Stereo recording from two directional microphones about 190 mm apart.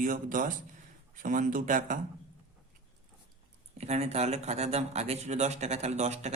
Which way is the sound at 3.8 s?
35° right (ahead or behind).